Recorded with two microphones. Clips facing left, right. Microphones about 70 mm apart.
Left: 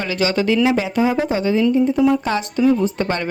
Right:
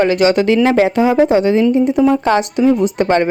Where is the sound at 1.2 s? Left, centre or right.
Right.